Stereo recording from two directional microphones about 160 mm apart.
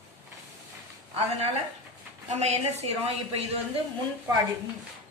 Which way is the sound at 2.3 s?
45° right (ahead or behind).